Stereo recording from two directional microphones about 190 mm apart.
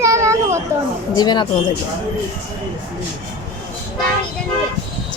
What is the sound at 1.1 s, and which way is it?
Speech, 20° left (ahead or behind).